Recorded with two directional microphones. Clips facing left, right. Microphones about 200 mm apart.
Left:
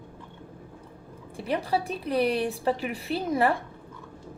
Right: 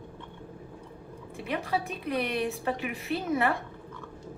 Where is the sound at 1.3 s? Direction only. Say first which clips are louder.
Left 3 dB; 35° left (ahead or behind).